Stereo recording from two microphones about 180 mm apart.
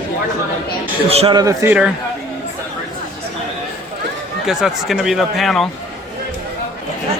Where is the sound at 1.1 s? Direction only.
35° right (ahead or behind).